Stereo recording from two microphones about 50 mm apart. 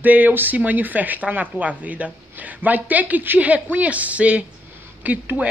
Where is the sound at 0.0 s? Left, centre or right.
Right.